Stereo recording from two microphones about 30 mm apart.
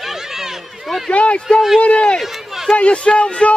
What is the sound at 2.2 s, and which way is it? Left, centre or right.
Run, centre.